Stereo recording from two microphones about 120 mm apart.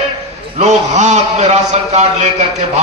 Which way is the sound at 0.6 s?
70° right (ahead or behind).